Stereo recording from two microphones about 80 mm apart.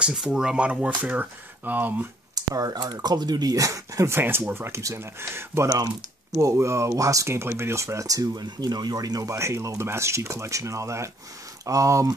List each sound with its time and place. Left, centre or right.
0.0 s speech: centre
2.3 s speech: right
4.1 s speech: right
9.3 s speech: right